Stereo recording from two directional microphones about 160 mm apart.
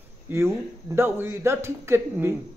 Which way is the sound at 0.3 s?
15° right (ahead or behind).